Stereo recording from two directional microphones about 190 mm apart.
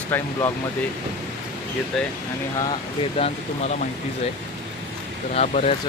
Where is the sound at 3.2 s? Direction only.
30° left (ahead or behind).